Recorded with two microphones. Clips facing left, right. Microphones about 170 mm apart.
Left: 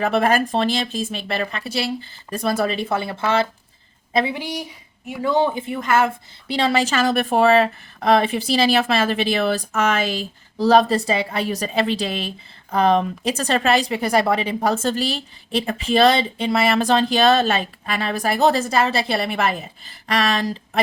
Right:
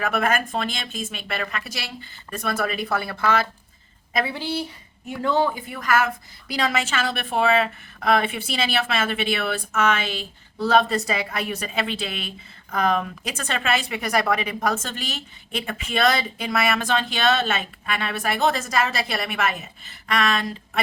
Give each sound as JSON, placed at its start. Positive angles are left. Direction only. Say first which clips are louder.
{"t": 0.0, "sound": "speech", "louder": "left 5 dB", "side_deg": 30}
{"t": 4.4, "sound": "speech", "louder": "right 1 dB", "side_deg": 15}
{"t": 5.4, "sound": "speech", "louder": "left 3 dB", "side_deg": 25}